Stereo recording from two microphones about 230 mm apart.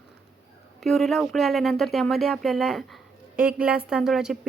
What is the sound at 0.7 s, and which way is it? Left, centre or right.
A woman's voice, centre.